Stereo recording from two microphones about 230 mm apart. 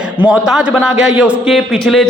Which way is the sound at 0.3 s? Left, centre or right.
Centre.